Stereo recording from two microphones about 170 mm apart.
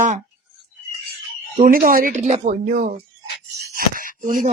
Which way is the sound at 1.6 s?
55° right (ahead or behind).